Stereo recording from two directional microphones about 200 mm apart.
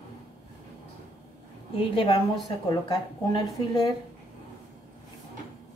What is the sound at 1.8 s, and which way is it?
Speech, 25° left (ahead or behind).